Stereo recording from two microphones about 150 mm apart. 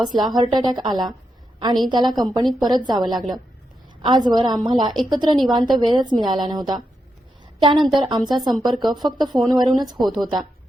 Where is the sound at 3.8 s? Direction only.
30° right (ahead or behind).